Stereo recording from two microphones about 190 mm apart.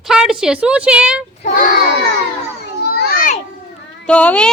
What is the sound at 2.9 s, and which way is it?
Children playing, 50° left (ahead or behind).